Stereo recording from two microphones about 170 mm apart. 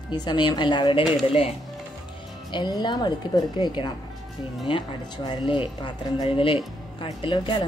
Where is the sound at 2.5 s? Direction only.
25° left (ahead or behind).